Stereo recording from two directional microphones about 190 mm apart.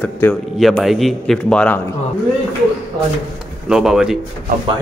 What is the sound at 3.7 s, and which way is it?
Speech, 5° right (ahead or behind).